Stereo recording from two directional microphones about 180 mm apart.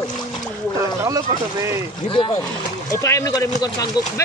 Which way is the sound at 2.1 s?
25° left (ahead or behind).